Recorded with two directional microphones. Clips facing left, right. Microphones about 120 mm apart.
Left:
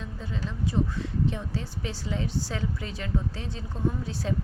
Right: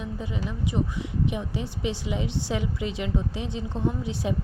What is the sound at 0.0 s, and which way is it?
A woman's voice, 15° right (ahead or behind).